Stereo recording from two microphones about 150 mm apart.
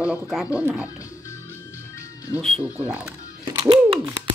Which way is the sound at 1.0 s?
20° left (ahead or behind).